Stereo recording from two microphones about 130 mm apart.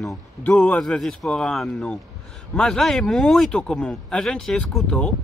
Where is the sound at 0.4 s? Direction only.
10° left (ahead or behind).